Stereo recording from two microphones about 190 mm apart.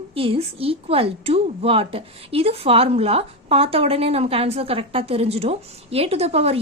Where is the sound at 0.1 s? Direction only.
30° right (ahead or behind).